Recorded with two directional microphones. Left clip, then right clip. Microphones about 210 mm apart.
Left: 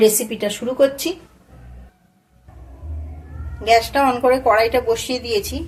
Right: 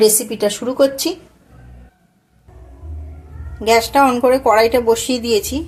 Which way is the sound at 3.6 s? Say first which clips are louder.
Right 2 dB; 35° right (ahead or behind).